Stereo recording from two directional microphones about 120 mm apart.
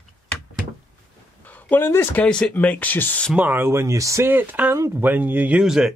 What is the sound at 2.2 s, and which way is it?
Speech, 5° left (ahead or behind).